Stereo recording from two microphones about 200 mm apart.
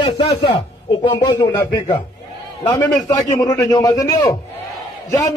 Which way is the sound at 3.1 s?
15° left (ahead or behind).